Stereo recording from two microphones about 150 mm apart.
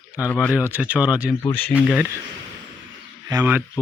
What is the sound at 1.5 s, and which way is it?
Speech, 10° left (ahead or behind).